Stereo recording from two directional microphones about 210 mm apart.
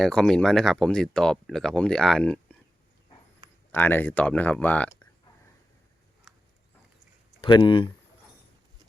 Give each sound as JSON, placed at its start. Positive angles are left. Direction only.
{"t": 0.0, "sound": "speech", "side_deg": 5}
{"t": 3.7, "sound": "speech", "side_deg": 10}
{"t": 6.3, "sound": "a sound", "side_deg": 0}
{"t": 7.4, "sound": "speech", "side_deg": 20}